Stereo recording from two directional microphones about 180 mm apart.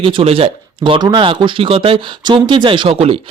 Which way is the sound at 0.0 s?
30° right (ahead or behind).